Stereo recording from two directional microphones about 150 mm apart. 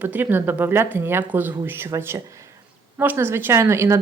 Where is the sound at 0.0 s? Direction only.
10° right (ahead or behind).